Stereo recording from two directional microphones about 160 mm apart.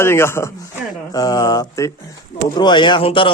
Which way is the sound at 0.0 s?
15° left (ahead or behind).